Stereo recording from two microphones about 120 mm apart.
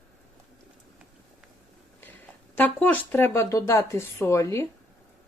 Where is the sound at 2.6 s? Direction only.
15° left (ahead or behind).